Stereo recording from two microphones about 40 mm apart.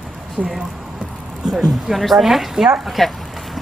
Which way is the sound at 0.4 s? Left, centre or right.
Right.